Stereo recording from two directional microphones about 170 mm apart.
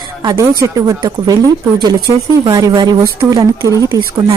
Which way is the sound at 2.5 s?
25° right (ahead or behind).